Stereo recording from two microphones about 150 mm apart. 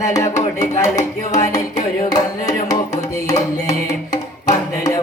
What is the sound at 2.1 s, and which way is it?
Music, 25° left (ahead or behind).